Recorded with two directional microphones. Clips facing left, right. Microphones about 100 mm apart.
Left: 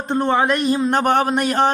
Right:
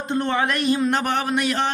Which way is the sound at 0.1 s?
45° left (ahead or behind).